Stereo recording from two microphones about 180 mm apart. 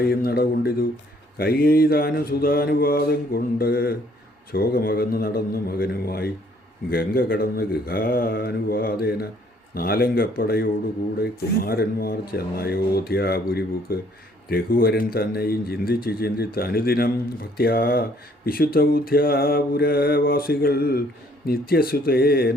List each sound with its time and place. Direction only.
0.1 s mantra: 55° left (ahead or behind)